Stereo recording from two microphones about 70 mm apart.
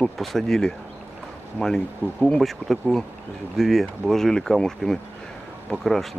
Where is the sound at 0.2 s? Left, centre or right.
Centre.